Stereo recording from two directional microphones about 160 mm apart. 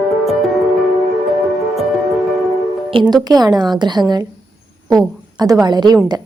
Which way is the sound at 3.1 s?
25° right (ahead or behind).